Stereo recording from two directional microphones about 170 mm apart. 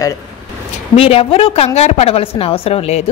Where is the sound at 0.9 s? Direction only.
35° left (ahead or behind).